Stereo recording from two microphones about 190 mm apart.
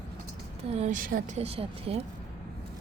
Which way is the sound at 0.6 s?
35° right (ahead or behind).